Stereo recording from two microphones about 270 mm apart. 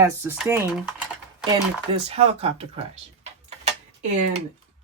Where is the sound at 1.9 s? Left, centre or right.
Right.